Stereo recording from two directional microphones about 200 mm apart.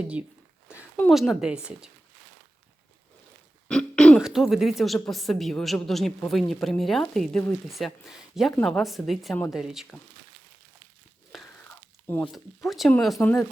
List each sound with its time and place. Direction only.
0.9 s speech: 5° left (ahead or behind)
3.7 s speech: 5° left (ahead or behind)
11.3 s a sound: centre (ahead or behind)
12.1 s speech: 10° left (ahead or behind)
13.1 s speech: 15° left (ahead or behind)